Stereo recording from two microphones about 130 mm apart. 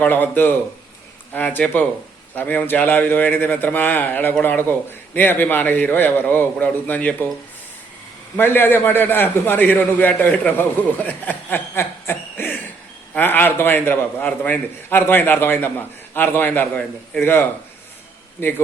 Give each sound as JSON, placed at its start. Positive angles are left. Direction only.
{"t": 0.0, "sound": "a man's voice", "side_deg": 15}
{"t": 8.4, "sound": "a man's voice", "side_deg": 15}